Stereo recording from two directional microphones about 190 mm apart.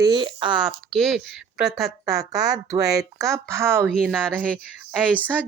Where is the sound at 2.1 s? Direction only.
20° right (ahead or behind).